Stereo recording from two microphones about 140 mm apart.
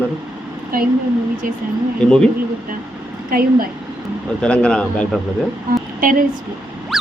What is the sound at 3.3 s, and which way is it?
Speech, 90° right.